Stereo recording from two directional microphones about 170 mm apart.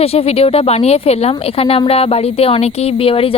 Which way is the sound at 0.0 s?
35° left (ahead or behind).